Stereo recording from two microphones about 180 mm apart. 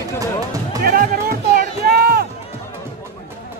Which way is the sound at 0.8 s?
55° right (ahead or behind).